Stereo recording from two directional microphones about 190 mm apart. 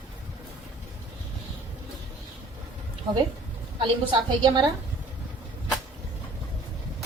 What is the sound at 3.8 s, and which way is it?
Speech, 25° right (ahead or behind).